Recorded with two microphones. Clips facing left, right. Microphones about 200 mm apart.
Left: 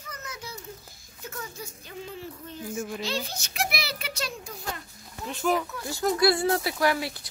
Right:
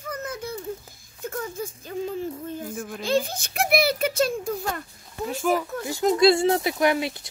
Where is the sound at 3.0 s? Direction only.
50° right (ahead or behind).